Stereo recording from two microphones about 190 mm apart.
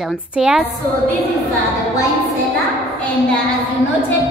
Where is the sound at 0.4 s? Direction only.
5° right (ahead or behind).